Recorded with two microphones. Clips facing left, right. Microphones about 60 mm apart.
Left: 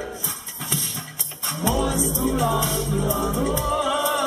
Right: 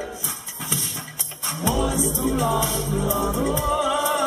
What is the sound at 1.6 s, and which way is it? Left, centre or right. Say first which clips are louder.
Music: even; centre.